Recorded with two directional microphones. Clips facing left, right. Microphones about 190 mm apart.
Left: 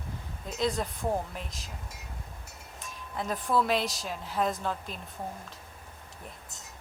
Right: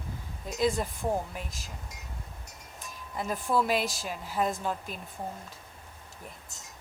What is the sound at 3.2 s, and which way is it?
A woman's voice, 5° right (ahead or behind).